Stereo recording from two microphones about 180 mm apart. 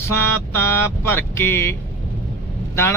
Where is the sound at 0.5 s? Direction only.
10° left (ahead or behind).